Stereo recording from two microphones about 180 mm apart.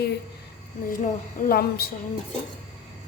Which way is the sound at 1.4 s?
60° left (ahead or behind).